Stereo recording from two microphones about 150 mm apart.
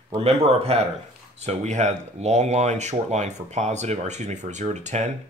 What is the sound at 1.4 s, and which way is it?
Speech, 50° right (ahead or behind).